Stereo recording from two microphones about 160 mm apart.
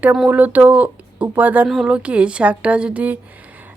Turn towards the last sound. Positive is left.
turn(degrees=-10)  # may be behind; listen again after turning